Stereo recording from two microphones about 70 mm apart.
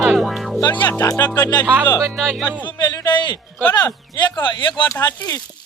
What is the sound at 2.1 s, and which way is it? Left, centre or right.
Speech, centre.